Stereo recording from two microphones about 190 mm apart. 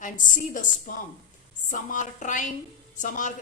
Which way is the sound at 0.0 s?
45° left (ahead or behind).